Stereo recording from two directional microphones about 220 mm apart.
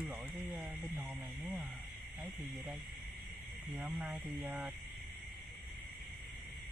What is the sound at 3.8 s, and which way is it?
Speech, 5° right (ahead or behind).